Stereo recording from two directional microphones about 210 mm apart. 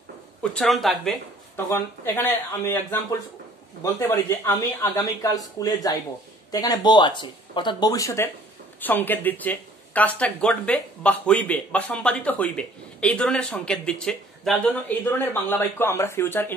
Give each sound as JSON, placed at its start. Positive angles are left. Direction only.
{"t": 0.4, "sound": "speech", "side_deg": 0}
{"t": 1.7, "sound": "speech", "side_deg": 15}